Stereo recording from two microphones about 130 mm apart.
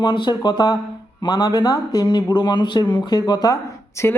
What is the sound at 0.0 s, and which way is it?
Speech, 35° left (ahead or behind).